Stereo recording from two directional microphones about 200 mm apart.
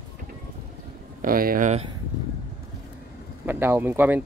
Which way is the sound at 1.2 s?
45° right (ahead or behind).